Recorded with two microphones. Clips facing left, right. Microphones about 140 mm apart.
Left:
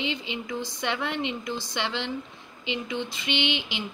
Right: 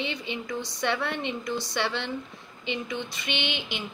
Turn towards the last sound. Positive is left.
turn(degrees=20)  # may be behind; listen again after turning